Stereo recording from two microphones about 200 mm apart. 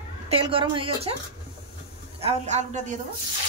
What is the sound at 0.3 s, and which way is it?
Speech, 25° right (ahead or behind).